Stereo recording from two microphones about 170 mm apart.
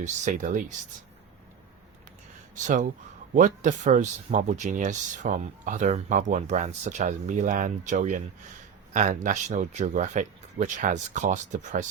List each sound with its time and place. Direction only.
0.0 s speech: 45° right (ahead or behind)
2.6 s speech: 45° right (ahead or behind)